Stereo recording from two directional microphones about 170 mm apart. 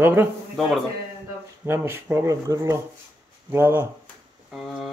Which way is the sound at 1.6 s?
15° right (ahead or behind).